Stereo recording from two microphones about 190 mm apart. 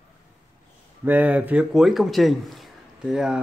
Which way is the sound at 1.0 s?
10° right (ahead or behind).